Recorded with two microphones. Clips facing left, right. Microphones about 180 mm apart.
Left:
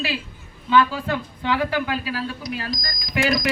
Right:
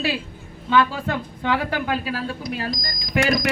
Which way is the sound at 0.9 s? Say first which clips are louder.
Even; 50° right (ahead or behind).